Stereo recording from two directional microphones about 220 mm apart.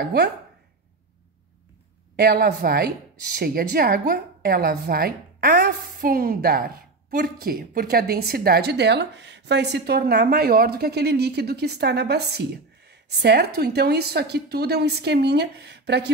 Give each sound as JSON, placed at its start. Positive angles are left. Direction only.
{"t": 2.1, "sound": "a woman's voice", "side_deg": -45}